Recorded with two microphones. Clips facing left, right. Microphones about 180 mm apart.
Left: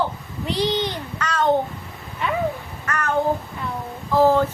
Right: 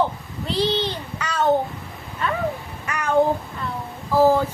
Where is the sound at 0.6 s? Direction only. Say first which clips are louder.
Right 1 dB; 15° left (ahead or behind).